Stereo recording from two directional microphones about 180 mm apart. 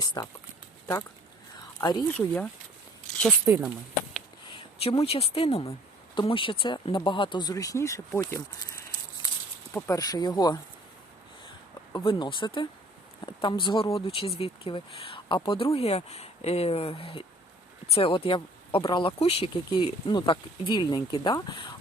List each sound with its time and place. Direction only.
0.0 s speech: 20° left (ahead or behind)
1.8 s speech: 20° left (ahead or behind)
2.1 s speech: 5° left (ahead or behind)
3.5 s speech: 15° right (ahead or behind)
4.4 s speech: 30° left (ahead or behind)
11.9 s speech: 25° left (ahead or behind)